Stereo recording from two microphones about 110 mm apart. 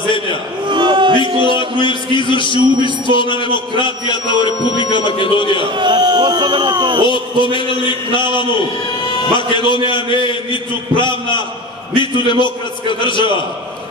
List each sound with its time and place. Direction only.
0.7 s music: 45° right (ahead or behind)
1.5 s a man's voice: 50° left (ahead or behind)
5.8 s speech: 45° right (ahead or behind)
7.1 s a man's voice: 50° left (ahead or behind)